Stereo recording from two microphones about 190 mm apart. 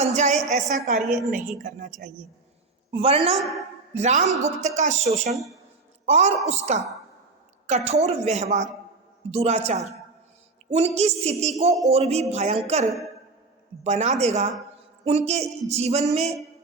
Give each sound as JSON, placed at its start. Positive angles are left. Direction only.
{"t": 0.0, "sound": "a woman's voice", "side_deg": -35}
{"t": 2.9, "sound": "a woman's voice", "side_deg": -30}
{"t": 3.3, "sound": "a woman's voice", "side_deg": 0}
{"t": 3.9, "sound": "a woman's voice", "side_deg": -35}
{"t": 13.8, "sound": "a woman's voice", "side_deg": -35}